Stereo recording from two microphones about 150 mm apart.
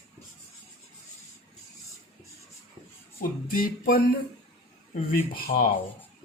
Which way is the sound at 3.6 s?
75° left (ahead or behind).